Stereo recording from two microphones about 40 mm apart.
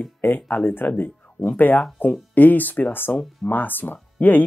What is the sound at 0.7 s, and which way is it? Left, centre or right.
Speech, left.